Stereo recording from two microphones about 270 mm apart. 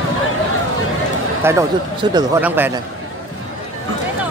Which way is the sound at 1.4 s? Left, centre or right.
Centre.